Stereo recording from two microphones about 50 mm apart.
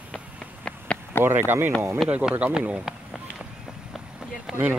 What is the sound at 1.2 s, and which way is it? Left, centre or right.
Speech, right.